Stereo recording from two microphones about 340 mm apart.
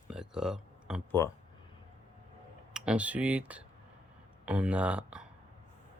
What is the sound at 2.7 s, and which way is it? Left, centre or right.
Speech, centre.